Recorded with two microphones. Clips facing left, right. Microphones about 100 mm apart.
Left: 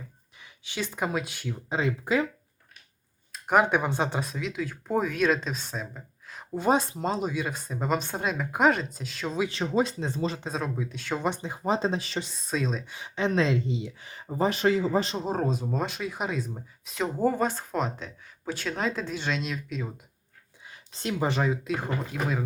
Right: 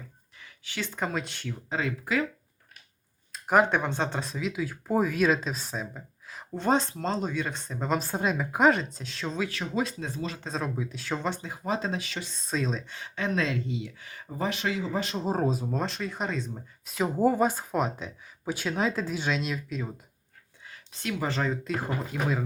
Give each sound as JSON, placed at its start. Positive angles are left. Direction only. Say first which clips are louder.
{"t": 0.3, "sound": "speech", "louder": "left 2 dB", "side_deg": 15}
{"t": 1.7, "sound": "speech", "louder": "left 3 dB", "side_deg": 20}
{"t": 3.3, "sound": "speech", "louder": "even", "side_deg": 0}
{"t": 9.5, "sound": "speech", "louder": "left 4 dB", "side_deg": 25}
{"t": 10.4, "sound": "speech", "louder": "left 1 dB", "side_deg": 5}
{"t": 11.2, "sound": "speech", "louder": "left 3 dB", "side_deg": 20}
{"t": 12.4, "sound": "speech", "louder": "right 1 dB", "side_deg": 0}
{"t": 13.1, "sound": "speech", "louder": "left 4 dB", "side_deg": 25}
{"t": 15.2, "sound": "speech", "louder": "right 1 dB", "side_deg": 0}
{"t": 20.9, "sound": "speech", "louder": "left 3 dB", "side_deg": 30}
{"t": 21.2, "sound": "speech", "louder": "left 3 dB", "side_deg": 10}